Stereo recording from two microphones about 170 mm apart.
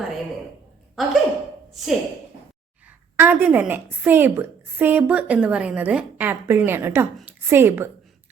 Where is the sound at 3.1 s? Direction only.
10° right (ahead or behind).